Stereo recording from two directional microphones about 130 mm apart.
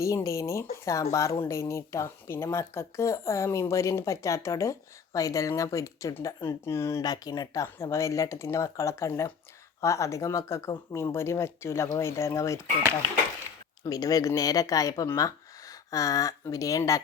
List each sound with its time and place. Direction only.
0.0 s speech: 25° left (ahead or behind)
13.8 s speech: 30° left (ahead or behind)